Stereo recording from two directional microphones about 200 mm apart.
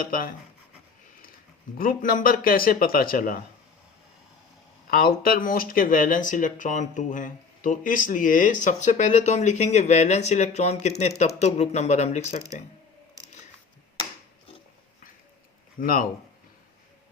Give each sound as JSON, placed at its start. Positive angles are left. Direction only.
{"t": 0.0, "sound": "speech", "side_deg": 45}
{"t": 1.8, "sound": "speech", "side_deg": 45}
{"t": 4.9, "sound": "speech", "side_deg": 45}
{"t": 15.8, "sound": "speech", "side_deg": 45}